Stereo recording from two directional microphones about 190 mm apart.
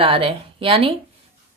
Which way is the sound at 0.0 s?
30° right (ahead or behind).